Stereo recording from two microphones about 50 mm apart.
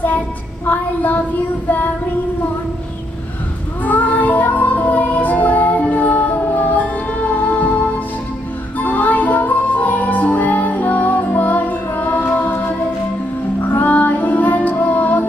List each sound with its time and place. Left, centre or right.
0.7 s a sound: left
3.8 s music: left
8.7 s music: left